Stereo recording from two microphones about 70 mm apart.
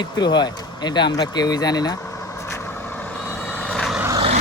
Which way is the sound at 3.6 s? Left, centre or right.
Centre.